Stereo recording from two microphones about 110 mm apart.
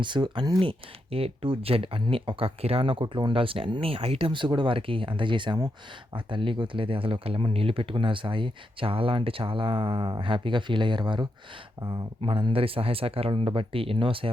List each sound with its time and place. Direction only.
0.0 s speech: 45° right (ahead or behind)
0.6 s speech: 55° right (ahead or behind)